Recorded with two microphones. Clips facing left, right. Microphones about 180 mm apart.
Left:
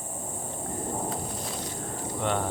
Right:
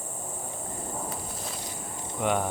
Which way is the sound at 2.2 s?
10° right (ahead or behind).